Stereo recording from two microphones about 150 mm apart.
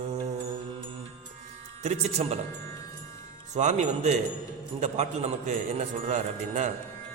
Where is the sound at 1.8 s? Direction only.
50° right (ahead or behind).